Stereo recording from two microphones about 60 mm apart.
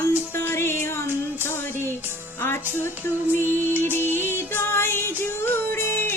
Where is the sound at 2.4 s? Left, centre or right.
Left.